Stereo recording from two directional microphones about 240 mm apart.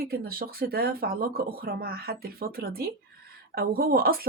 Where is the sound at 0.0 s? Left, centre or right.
Right.